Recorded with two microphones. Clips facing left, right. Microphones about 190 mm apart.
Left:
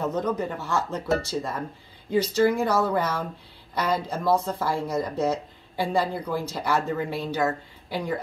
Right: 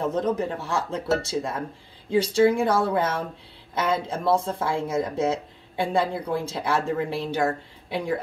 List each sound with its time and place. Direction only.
0.0 s speech: 25° right (ahead or behind)
2.0 s speech: 25° right (ahead or behind)